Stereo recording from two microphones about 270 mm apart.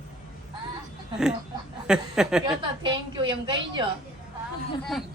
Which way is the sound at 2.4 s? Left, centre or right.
Centre.